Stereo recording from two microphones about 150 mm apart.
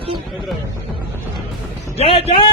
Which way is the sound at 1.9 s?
40° left (ahead or behind).